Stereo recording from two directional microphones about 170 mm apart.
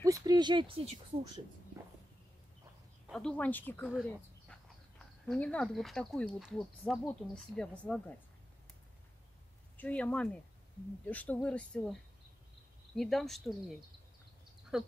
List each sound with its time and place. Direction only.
0.0 s speech: 20° right (ahead or behind)
3.1 s speech: 5° left (ahead or behind)
3.9 s speech: centre (ahead or behind)
9.8 s speech: 10° left (ahead or behind)